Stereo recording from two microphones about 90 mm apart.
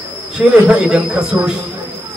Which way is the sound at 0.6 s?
10° right (ahead or behind).